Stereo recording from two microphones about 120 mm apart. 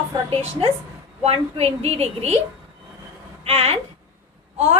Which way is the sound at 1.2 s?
60° right (ahead or behind).